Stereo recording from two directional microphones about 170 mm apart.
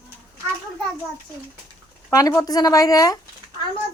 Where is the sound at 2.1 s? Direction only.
20° left (ahead or behind).